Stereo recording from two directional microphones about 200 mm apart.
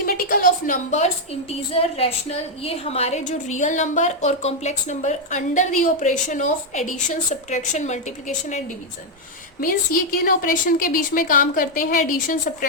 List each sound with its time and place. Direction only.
0.0 s a woman's voice: 45° left (ahead or behind)